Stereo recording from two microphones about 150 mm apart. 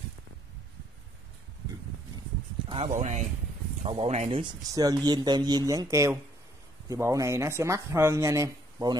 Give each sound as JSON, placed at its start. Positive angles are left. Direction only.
{"t": 2.9, "sound": "speech", "side_deg": -55}
{"t": 3.8, "sound": "speech", "side_deg": -45}
{"t": 4.4, "sound": "speech", "side_deg": -25}